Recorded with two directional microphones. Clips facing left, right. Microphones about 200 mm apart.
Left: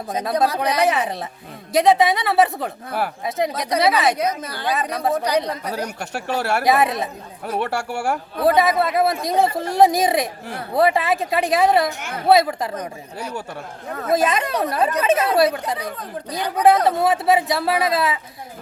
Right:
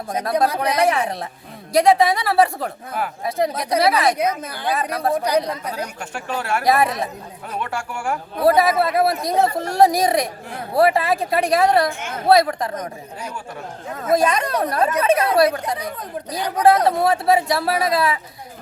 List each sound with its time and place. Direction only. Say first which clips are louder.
0.1 s speech: even; 5° left (ahead or behind)
5.1 s speech: right 1 dB; 10° right (ahead or behind)
6.2 s speech: left 3 dB; 70° left (ahead or behind)
6.7 s speech: right 1 dB; centre (ahead or behind)
7.7 s speech: left 3 dB; 70° left (ahead or behind)
8.4 s a woman's voice: right 1 dB; centre (ahead or behind)
16.0 s speech: even; 10° right (ahead or behind)
16.6 s speech: even; centre (ahead or behind)